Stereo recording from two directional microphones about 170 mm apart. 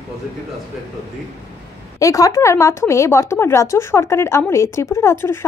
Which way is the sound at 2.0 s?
20° left (ahead or behind).